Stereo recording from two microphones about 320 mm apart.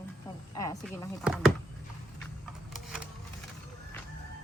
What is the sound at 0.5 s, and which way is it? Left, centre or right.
Snake, centre.